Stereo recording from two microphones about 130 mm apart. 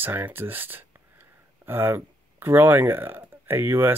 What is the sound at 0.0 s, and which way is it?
Speech, 15° right (ahead or behind).